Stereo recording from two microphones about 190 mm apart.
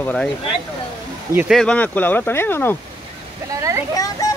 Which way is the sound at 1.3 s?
Centre (ahead or behind).